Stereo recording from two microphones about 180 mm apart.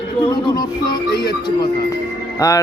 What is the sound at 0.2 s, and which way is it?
Music, 25° left (ahead or behind).